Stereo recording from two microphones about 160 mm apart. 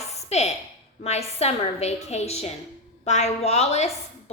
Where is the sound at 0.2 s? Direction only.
40° left (ahead or behind).